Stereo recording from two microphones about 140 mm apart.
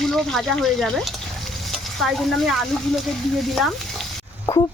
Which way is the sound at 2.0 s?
Centre (ahead or behind).